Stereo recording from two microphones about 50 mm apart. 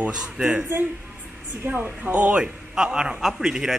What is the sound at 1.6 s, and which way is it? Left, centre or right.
Speech, right.